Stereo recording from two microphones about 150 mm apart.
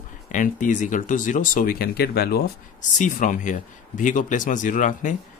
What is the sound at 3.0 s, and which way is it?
Speech, 55° left (ahead or behind).